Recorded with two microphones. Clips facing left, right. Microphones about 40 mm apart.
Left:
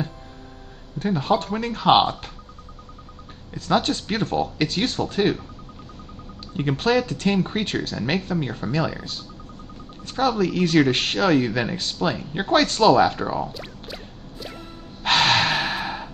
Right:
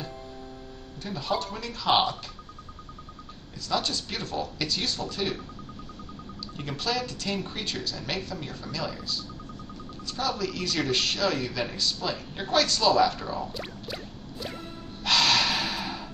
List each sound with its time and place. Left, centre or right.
0.9 s speech: left
3.5 s speech: left
6.5 s speech: left
13.5 s a sound: centre
15.0 s breathing: left